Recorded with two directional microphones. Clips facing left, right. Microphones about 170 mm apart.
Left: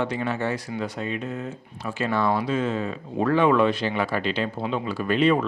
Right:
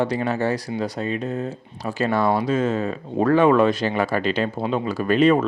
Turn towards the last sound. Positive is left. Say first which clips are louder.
# right 4 dB
turn(degrees=-45)  # may be behind; listen again after turning